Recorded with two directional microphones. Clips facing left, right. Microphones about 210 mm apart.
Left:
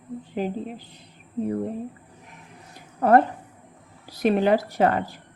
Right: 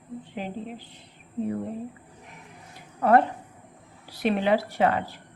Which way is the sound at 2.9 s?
40° left (ahead or behind).